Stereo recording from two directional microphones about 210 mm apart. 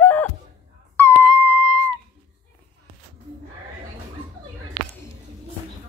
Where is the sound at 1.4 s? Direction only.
10° right (ahead or behind).